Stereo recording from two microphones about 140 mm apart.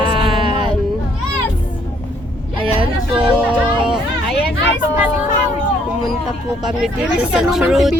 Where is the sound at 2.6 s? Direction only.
40° right (ahead or behind).